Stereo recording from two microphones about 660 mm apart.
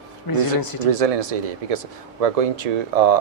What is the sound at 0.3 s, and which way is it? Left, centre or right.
Speech, left.